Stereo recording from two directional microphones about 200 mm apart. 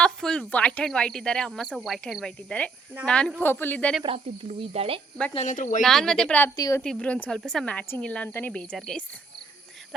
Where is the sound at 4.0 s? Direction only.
30° right (ahead or behind).